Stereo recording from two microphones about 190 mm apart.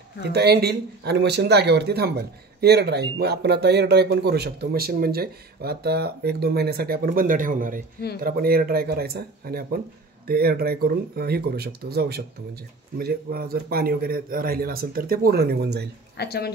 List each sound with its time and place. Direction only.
0.3 s speech: 55° right (ahead or behind)
16.2 s speech: 60° left (ahead or behind)